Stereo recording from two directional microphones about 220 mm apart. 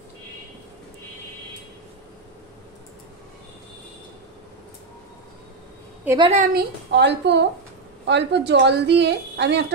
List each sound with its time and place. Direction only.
6.0 s a woman's voice: 20° right (ahead or behind)
6.3 s a woman's voice: 50° right (ahead or behind)